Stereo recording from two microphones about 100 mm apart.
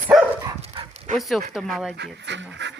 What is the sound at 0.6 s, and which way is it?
Dog, 65° right (ahead or behind).